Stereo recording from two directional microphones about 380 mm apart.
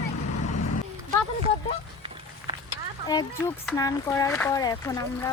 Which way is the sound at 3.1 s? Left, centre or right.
Centre.